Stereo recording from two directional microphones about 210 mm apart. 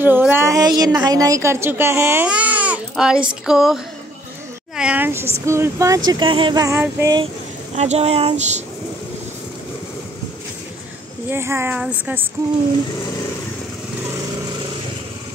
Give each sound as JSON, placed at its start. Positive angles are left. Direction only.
{"t": 0.0, "sound": "a woman's voice", "side_deg": -10}
{"t": 7.7, "sound": "a sound", "side_deg": -30}
{"t": 11.2, "sound": "a woman's voice", "side_deg": -10}